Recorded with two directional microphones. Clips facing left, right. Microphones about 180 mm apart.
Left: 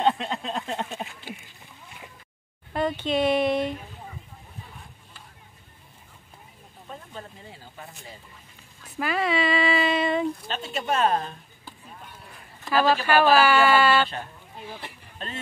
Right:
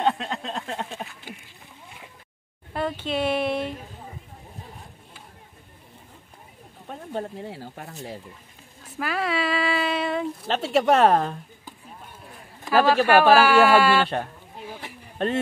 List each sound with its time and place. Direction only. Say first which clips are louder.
0.0 s a sound: left 1 dB; centre (ahead or behind)
2.7 s speech: left 2 dB; 5° right (ahead or behind)
6.9 s speech: right 9 dB; 60° right (ahead or behind)
9.0 s speech: left 1 dB; centre (ahead or behind)
10.5 s speech: right 8 dB; 85° right
12.8 s speech: right 3 dB; 5° right (ahead or behind)
15.1 s speech: right 13 dB; 65° right (ahead or behind)